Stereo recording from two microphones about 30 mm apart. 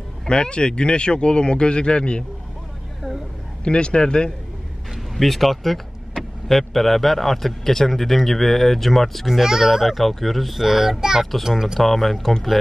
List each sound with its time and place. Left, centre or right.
0.3 s speech: left
3.6 s speech: left
5.1 s speech: centre
9.2 s a child's voice: centre
9.8 s speech: centre
10.6 s a child's voice: centre
11.8 s speech: centre